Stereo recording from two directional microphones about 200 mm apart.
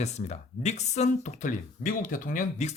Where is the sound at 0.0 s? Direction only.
35° left (ahead or behind).